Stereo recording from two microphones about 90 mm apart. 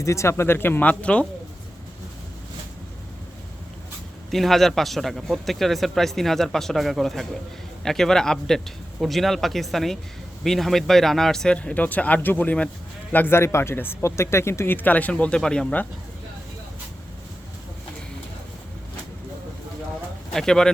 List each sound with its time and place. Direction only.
0.0 s speech: 35° left (ahead or behind); by 1.3 s 15° left (ahead or behind)
4.3 s a man's voice: centre (ahead or behind)
13.1 s speech: 25° left (ahead or behind)
20.3 s speech: 5° left (ahead or behind)